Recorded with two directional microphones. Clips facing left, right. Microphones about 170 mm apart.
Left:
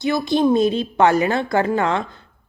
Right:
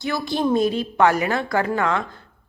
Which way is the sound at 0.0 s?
20° left (ahead or behind).